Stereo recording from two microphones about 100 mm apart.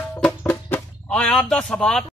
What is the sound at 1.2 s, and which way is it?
Speech, 5° left (ahead or behind).